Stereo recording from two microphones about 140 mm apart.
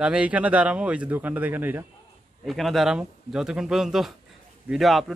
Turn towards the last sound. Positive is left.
turn(degrees=0)  # may be behind; listen again after turning